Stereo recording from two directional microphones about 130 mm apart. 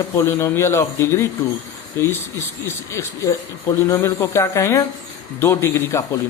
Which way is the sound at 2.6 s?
20° left (ahead or behind).